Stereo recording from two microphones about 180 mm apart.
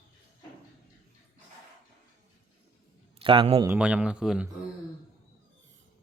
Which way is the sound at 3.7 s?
5° right (ahead or behind).